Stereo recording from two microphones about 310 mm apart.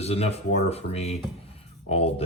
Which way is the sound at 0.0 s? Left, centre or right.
Centre.